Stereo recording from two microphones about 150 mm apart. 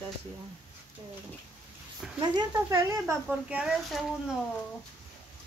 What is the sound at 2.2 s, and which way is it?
Speech, 25° right (ahead or behind).